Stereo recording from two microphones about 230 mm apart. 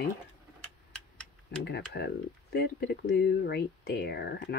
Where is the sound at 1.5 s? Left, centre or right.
Left.